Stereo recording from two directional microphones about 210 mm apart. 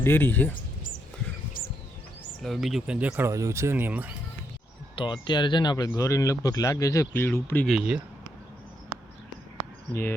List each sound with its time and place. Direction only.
0.0 s speech: 10° left (ahead or behind)
2.4 s speech: centre (ahead or behind)
4.9 s speech: 25° left (ahead or behind)
7.8 s speech: 5° right (ahead or behind)
9.9 s speech: 10° left (ahead or behind)